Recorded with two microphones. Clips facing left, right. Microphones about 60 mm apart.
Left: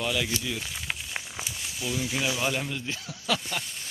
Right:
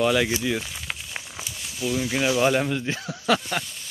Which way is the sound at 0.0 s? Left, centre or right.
Right.